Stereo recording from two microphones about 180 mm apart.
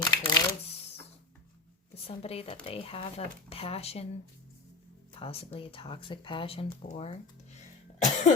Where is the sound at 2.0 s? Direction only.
35° left (ahead or behind).